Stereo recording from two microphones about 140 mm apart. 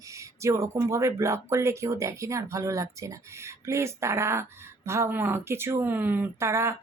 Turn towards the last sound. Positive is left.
turn(degrees=-20)  # may be behind; listen again after turning